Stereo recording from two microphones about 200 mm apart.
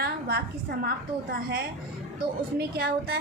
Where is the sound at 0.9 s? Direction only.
50° right (ahead or behind).